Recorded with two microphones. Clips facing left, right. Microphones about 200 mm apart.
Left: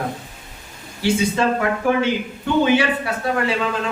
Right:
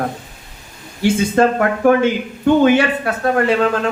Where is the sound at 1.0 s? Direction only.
50° right (ahead or behind).